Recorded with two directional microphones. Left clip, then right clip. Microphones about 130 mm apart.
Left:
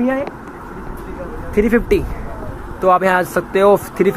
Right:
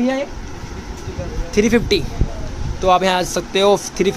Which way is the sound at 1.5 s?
50° right (ahead or behind).